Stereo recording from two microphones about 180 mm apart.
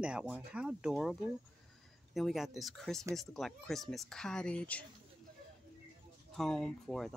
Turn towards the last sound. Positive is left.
turn(degrees=0)  # may be behind; listen again after turning